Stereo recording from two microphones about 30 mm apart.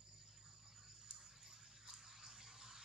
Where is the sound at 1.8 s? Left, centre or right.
Centre.